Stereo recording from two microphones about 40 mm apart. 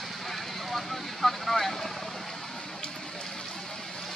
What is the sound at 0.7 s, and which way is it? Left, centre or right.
Vehicle, centre.